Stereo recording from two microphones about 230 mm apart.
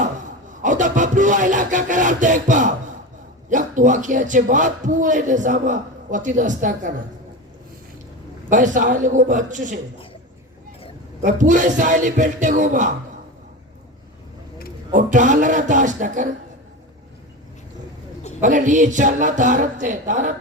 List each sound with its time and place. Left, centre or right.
0.6 s a man's voice: right
8.4 s a man's voice: right
11.2 s a man's voice: right
14.9 s a man's voice: right
18.3 s a man's voice: right